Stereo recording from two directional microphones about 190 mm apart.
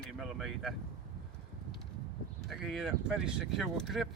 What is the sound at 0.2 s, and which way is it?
Speech, centre (ahead or behind).